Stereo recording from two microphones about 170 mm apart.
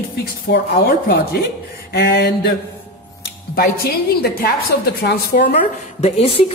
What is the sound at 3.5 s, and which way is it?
Speech, 65° left (ahead or behind).